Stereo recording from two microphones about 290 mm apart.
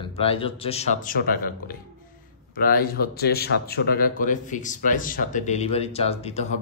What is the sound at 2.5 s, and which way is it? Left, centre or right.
Speech, left.